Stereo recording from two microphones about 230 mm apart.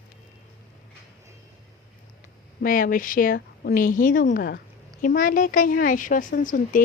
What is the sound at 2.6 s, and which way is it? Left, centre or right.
Speech, left.